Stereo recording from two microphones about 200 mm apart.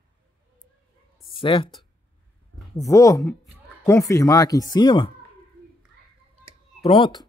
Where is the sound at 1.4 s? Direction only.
25° left (ahead or behind).